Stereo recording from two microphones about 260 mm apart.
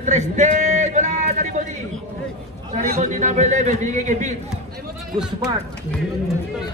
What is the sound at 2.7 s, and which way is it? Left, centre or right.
A man's voice, right.